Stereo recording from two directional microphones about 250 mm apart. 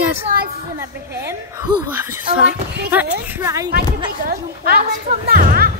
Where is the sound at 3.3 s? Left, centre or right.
Centre.